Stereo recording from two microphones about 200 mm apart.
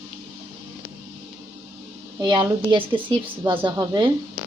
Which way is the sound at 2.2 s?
20° right (ahead or behind).